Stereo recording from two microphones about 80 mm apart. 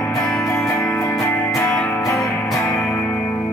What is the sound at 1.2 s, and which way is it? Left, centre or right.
Music, left.